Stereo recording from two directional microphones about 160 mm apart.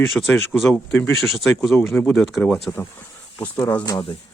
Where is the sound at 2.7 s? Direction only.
15° left (ahead or behind).